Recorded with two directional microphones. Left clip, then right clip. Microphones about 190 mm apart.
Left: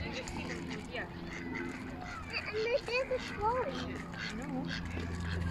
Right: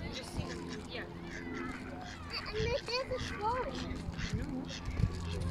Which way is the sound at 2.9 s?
35° left (ahead or behind).